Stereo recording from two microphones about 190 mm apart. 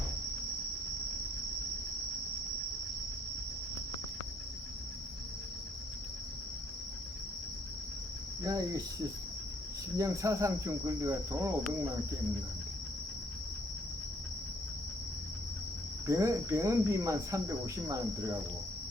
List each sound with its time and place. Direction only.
8.4 s cricket: 20° right (ahead or behind)
10.0 s cricket: 15° right (ahead or behind)
16.0 s cricket: 15° right (ahead or behind)